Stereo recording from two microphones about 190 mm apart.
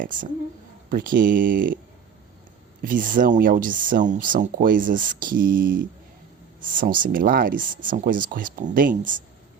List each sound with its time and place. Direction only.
0.0 s speech: 45° right (ahead or behind)
2.8 s speech: 45° right (ahead or behind)